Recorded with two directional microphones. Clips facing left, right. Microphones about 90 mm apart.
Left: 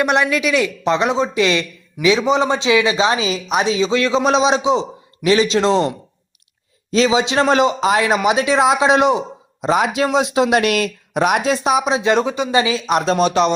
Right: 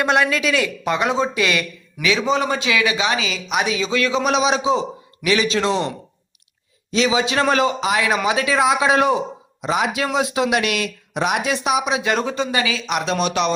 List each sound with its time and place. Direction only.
0.0 s speech: 20° left (ahead or behind); by 5.9 s 35° left (ahead or behind)
7.1 s speech: 25° left (ahead or behind)
8.2 s speech: 25° left (ahead or behind)
9.6 s speech: 35° left (ahead or behind)
11.4 s speech: 35° left (ahead or behind)
12.2 s speech: 15° left (ahead or behind)
12.5 s speech: 25° left (ahead or behind)
12.8 s speech: 40° left (ahead or behind)